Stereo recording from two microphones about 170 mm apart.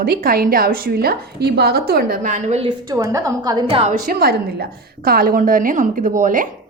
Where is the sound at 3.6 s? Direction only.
35° right (ahead or behind).